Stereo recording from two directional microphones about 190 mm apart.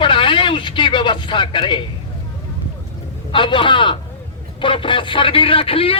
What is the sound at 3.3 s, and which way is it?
A man's voice, 25° left (ahead or behind).